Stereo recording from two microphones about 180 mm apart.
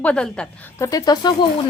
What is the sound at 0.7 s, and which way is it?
Speech, 20° left (ahead or behind).